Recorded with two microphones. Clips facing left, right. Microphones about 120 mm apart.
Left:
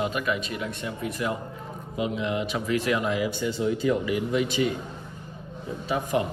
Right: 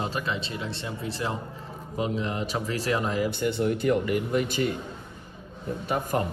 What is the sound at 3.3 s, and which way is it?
A man's voice, 60° right (ahead or behind).